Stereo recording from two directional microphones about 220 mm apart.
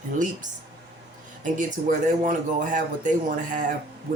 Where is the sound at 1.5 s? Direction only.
35° right (ahead or behind).